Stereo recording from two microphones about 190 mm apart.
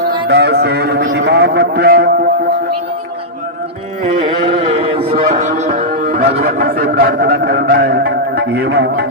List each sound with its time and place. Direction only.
0.3 s a man's voice: 60° right (ahead or behind)
4.0 s music: 30° right (ahead or behind); by 9.0 s 60° right (ahead or behind)